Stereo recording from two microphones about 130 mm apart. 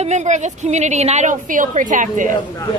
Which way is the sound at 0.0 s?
60° right (ahead or behind).